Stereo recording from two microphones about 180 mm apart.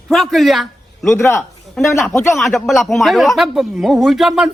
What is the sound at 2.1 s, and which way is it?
Speech, 15° left (ahead or behind).